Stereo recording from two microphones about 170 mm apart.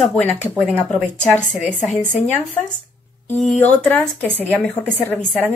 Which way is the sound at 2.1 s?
45° left (ahead or behind).